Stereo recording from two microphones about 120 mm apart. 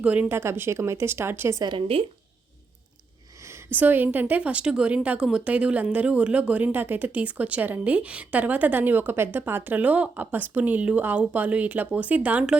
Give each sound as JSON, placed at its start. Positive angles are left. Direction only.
{"t": 0.0, "sound": "speech", "side_deg": -10}
{"t": 1.6, "sound": "speech", "side_deg": -45}
{"t": 3.4, "sound": "a woman's voice", "side_deg": -20}